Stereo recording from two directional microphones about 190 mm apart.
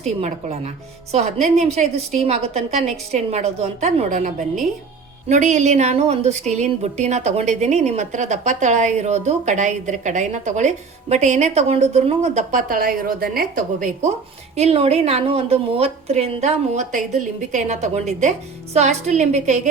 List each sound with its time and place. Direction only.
0.0 s a woman's voice: 35° right (ahead or behind)
14.5 s a woman's voice: 30° right (ahead or behind)